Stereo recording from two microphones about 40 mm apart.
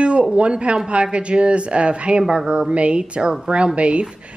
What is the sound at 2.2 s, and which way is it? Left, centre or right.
A woman's voice, centre.